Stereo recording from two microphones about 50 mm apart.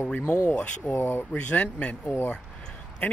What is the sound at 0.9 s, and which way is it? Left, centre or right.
Speech, left.